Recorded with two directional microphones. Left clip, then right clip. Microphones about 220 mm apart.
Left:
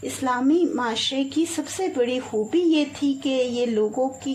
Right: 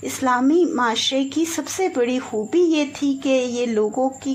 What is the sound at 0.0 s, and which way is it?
A woman's voice, 20° right (ahead or behind).